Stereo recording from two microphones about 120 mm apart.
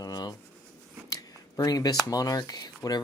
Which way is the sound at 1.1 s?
30° left (ahead or behind).